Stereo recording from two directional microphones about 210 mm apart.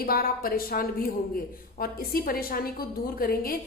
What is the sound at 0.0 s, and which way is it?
A woman's voice, 45° left (ahead or behind).